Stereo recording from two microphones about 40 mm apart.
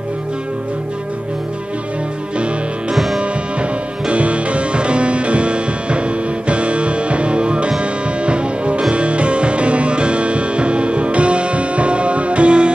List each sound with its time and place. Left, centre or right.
2.9 s music: centre
4.1 s music: right